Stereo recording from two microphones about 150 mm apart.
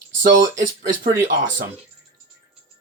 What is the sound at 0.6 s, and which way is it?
Speech, 70° right (ahead or behind).